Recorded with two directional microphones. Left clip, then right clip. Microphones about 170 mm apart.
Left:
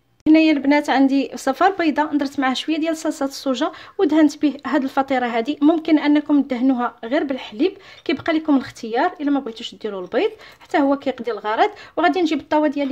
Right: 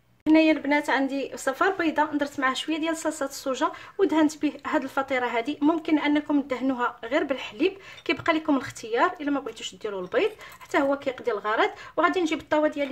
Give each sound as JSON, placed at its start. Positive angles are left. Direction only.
{"t": 0.2, "sound": "speech", "side_deg": 50}